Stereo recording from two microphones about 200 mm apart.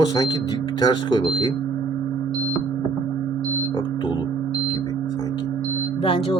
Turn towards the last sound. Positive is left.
turn(degrees=25)  # may be behind; listen again after turning